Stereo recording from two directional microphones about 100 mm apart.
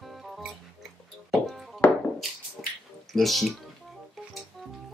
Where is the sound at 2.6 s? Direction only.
5° right (ahead or behind).